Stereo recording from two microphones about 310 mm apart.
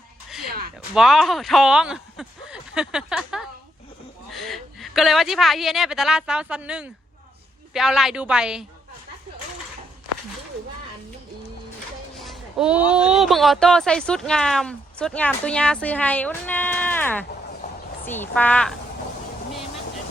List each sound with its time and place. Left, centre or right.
0.4 s a sound: right
0.9 s speech: centre
12.2 s speech: centre